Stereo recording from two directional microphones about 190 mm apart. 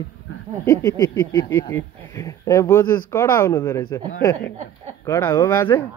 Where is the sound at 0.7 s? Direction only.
15° left (ahead or behind).